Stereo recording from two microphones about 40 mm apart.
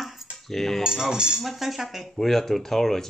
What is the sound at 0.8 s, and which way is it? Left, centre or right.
Speech, centre.